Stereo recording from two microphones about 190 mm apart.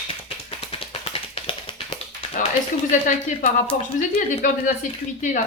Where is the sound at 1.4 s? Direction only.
30° left (ahead or behind).